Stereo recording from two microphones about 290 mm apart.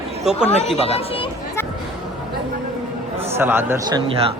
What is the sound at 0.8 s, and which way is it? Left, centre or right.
Speech, centre.